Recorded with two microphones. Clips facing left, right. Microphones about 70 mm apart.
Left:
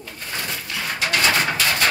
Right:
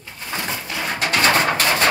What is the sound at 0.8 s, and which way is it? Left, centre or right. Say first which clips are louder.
Pigeon: right 2 dB; right.